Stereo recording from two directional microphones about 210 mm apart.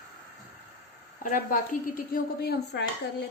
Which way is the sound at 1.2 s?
40° left (ahead or behind).